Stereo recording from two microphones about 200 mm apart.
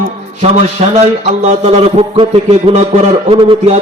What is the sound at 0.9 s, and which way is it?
A man's voice, 30° right (ahead or behind).